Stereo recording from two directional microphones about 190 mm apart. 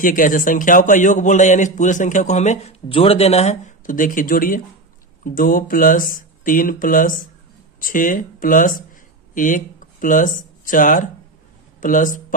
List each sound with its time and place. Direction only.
0.0 s a man's voice: 45° left (ahead or behind)